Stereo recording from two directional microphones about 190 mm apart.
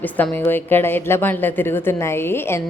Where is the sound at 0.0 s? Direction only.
10° left (ahead or behind).